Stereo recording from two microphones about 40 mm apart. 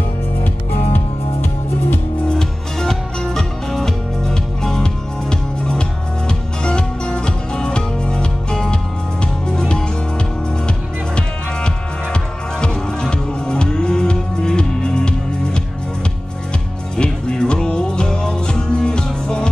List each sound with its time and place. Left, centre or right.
0.9 s music: left
2.3 s music: centre
11.1 s music: left
16.9 s music: centre